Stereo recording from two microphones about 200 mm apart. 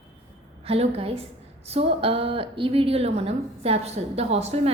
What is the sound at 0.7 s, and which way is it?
A woman's voice, 30° right (ahead or behind).